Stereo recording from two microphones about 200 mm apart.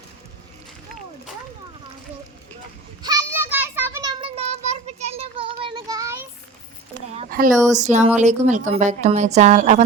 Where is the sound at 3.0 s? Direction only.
15° right (ahead or behind).